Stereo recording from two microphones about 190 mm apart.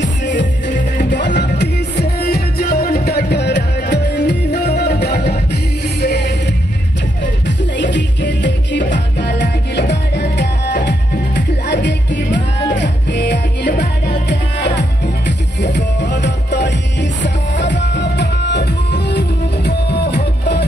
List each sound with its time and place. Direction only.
0.0 s music: 70° left (ahead or behind)